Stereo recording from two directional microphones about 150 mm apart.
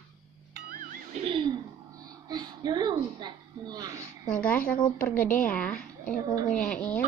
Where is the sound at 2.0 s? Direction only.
25° right (ahead or behind).